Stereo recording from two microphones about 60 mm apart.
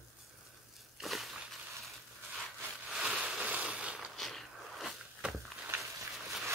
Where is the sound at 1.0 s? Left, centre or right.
Centre.